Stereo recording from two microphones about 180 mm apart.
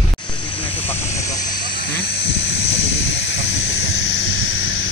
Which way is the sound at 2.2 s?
30° left (ahead or behind).